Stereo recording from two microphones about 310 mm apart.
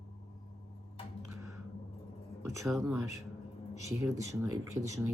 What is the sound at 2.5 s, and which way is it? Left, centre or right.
Speech, centre.